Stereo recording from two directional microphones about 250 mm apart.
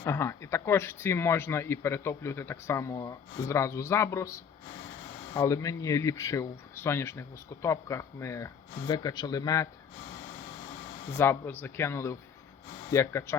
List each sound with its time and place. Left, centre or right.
0.0 s speech: centre
11.1 s speech: centre